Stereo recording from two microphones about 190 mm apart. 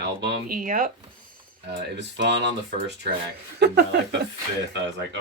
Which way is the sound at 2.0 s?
65° right (ahead or behind).